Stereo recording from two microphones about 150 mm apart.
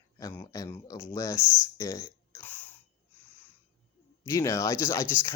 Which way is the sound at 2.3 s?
15° left (ahead or behind).